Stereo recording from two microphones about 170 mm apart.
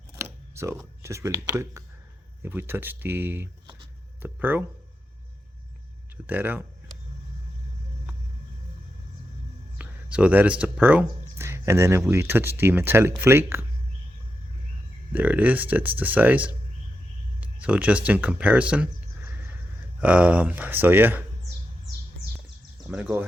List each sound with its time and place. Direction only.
0.2 s speech: 15° right (ahead or behind)
6.2 s speech: 10° right (ahead or behind)
9.7 s speech: 5° right (ahead or behind)
15.1 s speech: 10° right (ahead or behind)
22.9 s speech: 5° right (ahead or behind)